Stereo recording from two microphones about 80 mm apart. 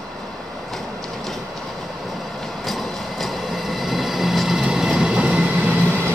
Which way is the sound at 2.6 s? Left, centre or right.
Centre.